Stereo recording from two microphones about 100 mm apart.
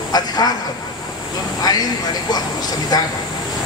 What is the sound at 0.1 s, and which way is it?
Speech, 40° left (ahead or behind).